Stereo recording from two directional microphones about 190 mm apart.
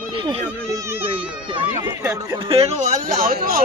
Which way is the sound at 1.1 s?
25° right (ahead or behind).